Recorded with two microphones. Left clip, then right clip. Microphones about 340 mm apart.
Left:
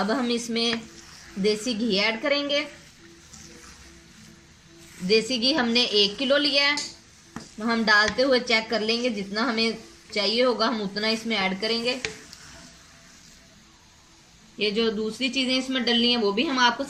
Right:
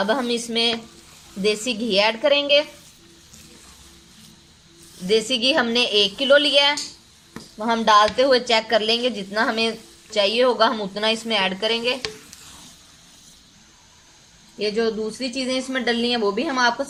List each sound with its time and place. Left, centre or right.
0.1 s a woman's voice: right
5.0 s a woman's voice: right
14.6 s a woman's voice: right